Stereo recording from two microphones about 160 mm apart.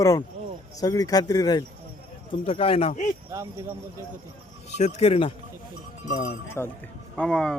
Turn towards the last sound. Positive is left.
turn(degrees=5)  # may be behind; listen again after turning